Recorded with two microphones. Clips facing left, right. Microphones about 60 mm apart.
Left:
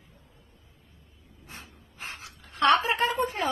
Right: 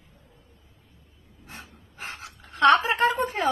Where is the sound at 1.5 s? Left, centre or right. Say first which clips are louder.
Right 2 dB; right.